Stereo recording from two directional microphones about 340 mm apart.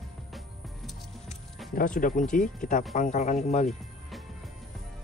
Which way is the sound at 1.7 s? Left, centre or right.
Left.